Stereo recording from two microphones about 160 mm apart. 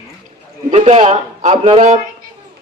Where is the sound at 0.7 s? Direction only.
45° right (ahead or behind).